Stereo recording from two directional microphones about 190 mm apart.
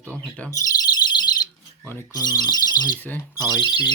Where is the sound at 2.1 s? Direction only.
20° left (ahead or behind).